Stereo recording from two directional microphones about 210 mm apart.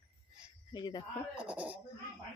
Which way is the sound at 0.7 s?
20° left (ahead or behind).